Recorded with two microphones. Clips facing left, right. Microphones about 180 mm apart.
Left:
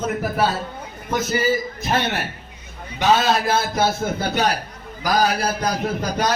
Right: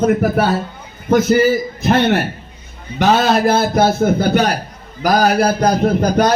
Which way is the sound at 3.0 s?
55° right (ahead or behind).